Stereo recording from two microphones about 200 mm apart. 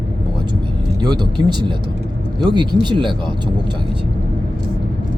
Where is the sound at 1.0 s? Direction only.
20° right (ahead or behind).